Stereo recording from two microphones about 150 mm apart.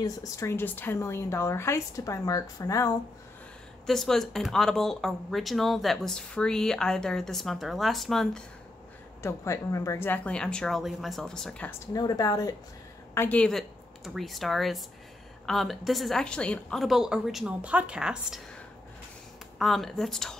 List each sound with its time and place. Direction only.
0.0 s speech: 20° left (ahead or behind)
3.8 s speech: centre (ahead or behind)
9.2 s speech: 20° left (ahead or behind)
11.9 s speech: 25° left (ahead or behind)
13.1 s speech: 15° left (ahead or behind); by 18.4 s 5° right (ahead or behind)
19.6 s speech: centre (ahead or behind)